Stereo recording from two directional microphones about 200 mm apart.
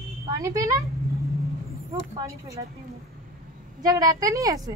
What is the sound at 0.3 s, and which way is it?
Speech, 15° right (ahead or behind).